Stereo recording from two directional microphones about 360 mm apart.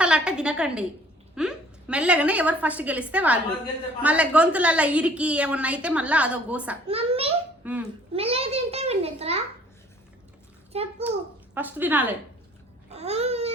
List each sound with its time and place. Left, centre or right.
0.0 s a woman's voice: centre
6.9 s a child's voice: centre
7.6 s a child's voice: centre
8.1 s a child's voice: centre
10.7 s a child's voice: centre
11.5 s a woman's voice: centre
12.9 s babbling: centre